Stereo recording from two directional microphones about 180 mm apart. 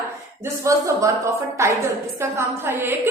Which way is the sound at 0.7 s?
15° right (ahead or behind).